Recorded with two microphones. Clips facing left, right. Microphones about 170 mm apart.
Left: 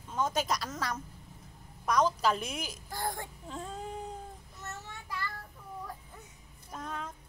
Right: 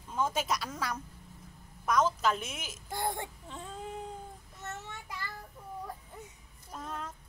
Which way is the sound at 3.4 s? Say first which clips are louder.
Left 2 dB; centre (ahead or behind).